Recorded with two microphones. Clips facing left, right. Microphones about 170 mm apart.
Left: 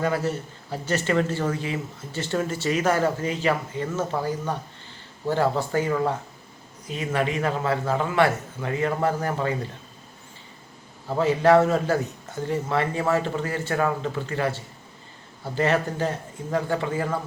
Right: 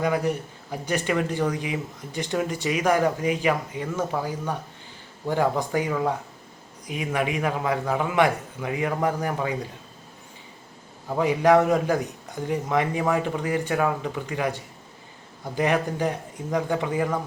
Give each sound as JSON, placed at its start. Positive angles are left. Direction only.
{"t": 0.0, "sound": "speech", "side_deg": -15}
{"t": 11.2, "sound": "speech", "side_deg": -15}